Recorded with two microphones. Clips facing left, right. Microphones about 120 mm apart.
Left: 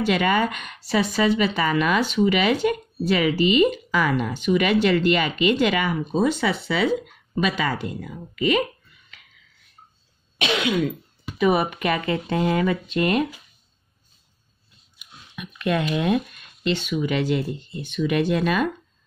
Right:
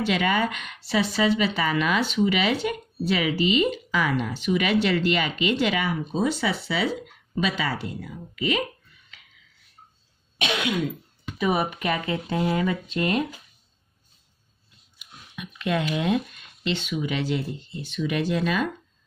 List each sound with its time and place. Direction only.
0.0 s speech: 45° left (ahead or behind)
10.4 s throat clearing: 90° left
11.3 s speech: 65° left (ahead or behind)
15.0 s a sound: 55° left (ahead or behind)
15.9 s speech: 55° left (ahead or behind)